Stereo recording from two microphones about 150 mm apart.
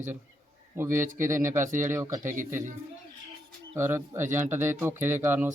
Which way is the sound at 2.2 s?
60° right (ahead or behind).